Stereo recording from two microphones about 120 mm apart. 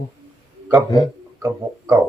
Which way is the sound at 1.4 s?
25° right (ahead or behind).